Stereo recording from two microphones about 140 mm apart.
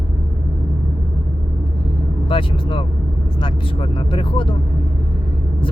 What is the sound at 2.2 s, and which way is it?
Speech, 35° left (ahead or behind).